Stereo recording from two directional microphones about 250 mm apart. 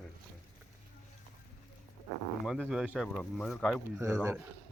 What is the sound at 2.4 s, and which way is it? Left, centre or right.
Speech, centre.